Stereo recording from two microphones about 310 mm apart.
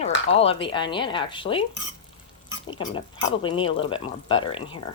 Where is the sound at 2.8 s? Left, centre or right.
Centre.